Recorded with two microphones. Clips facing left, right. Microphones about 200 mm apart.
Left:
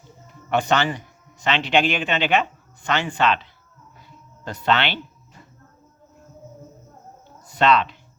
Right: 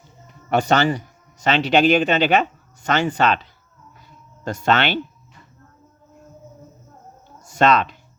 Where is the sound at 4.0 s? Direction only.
45° right (ahead or behind).